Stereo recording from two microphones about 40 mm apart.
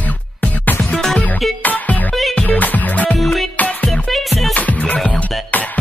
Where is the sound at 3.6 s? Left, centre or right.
Left.